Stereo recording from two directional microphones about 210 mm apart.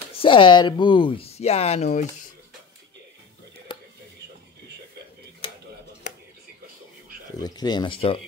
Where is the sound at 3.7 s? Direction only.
25° left (ahead or behind).